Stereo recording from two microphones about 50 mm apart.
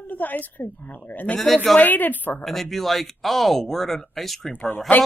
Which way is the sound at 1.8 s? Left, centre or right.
Left.